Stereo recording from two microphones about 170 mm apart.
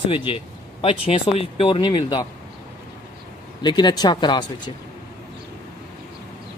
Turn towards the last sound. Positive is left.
turn(degrees=25)  # may be behind; listen again after turning